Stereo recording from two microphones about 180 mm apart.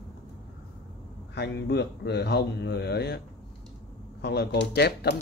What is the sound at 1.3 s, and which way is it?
Speech, 70° left (ahead or behind).